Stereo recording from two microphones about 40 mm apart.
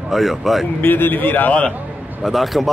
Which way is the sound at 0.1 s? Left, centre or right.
Centre.